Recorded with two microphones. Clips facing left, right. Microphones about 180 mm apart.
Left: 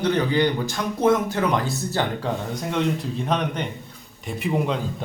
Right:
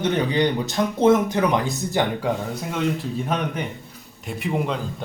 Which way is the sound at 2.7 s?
Centre (ahead or behind).